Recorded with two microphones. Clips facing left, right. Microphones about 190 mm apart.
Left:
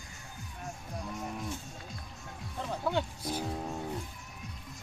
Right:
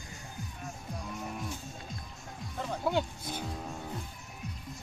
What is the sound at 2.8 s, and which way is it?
Speech, 10° right (ahead or behind).